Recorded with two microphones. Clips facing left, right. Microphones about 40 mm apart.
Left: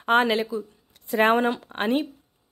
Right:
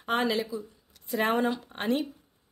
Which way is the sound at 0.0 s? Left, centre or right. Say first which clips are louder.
Left 7 dB; left.